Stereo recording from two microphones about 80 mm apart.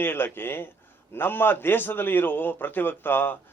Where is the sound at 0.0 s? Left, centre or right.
Left.